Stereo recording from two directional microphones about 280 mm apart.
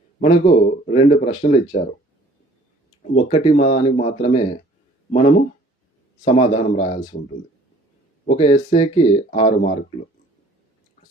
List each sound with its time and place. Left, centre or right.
0.2 s speech: left
3.2 s speech: left
6.2 s speech: left
8.3 s speech: left